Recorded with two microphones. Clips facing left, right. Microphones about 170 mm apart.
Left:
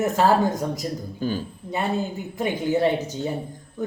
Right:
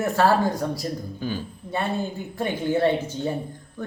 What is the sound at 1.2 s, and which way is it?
Speech, 45° left (ahead or behind).